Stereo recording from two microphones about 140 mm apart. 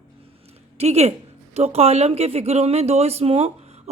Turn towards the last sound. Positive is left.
turn(degrees=-45)  # may be behind; listen again after turning